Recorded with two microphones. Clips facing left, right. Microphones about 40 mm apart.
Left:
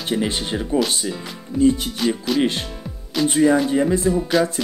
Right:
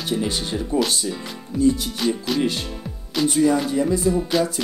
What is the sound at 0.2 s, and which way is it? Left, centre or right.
Speech, left.